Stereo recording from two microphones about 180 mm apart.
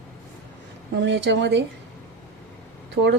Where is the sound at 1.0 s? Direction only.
75° right (ahead or behind).